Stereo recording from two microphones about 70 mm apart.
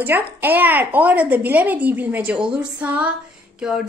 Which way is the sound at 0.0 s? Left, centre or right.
Right.